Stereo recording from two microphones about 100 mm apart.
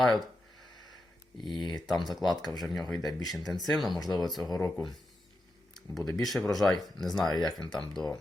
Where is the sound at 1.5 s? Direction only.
45° left (ahead or behind).